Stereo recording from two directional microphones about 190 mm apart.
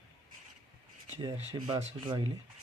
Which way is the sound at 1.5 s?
20° right (ahead or behind).